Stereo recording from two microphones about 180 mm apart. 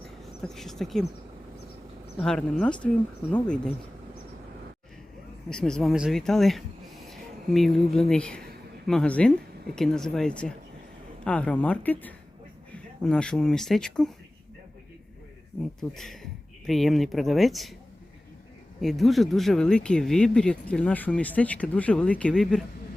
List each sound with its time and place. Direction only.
0.4 s speech: centre (ahead or behind)
2.2 s speech: 5° left (ahead or behind)
5.5 s a woman's voice: 5° left (ahead or behind)
15.8 s speech: centre (ahead or behind)
18.8 s speech: centre (ahead or behind)